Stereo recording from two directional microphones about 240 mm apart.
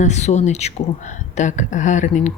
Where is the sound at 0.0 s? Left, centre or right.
Left.